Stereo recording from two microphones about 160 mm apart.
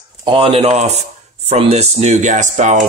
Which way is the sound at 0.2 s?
35° right (ahead or behind).